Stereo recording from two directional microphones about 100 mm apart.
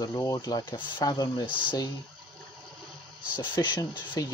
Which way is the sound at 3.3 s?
50° left (ahead or behind).